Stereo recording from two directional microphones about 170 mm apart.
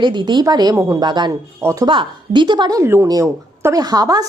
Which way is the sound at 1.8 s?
30° right (ahead or behind).